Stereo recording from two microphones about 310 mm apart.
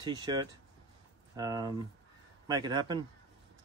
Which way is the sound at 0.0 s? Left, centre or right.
Centre.